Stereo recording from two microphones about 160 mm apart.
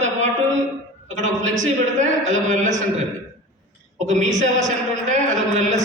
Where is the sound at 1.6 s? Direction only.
50° right (ahead or behind).